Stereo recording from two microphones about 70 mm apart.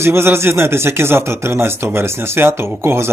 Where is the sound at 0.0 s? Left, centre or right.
Right.